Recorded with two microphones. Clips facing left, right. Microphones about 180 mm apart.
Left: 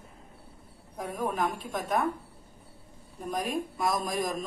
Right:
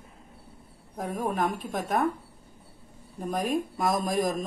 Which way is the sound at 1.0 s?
50° right (ahead or behind).